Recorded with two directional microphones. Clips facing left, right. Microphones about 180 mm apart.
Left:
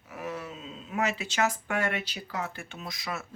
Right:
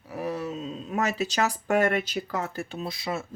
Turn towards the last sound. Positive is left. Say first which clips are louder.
# right 6 dB
turn(degrees=-30)  # may be behind; listen again after turning